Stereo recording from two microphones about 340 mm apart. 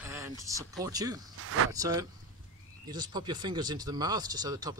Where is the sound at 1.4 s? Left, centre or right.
Right.